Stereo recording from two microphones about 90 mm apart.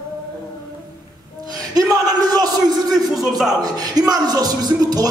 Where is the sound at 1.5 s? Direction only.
45° right (ahead or behind).